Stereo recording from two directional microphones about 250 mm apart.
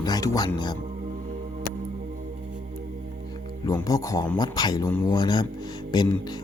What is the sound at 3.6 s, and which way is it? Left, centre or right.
Speech, centre.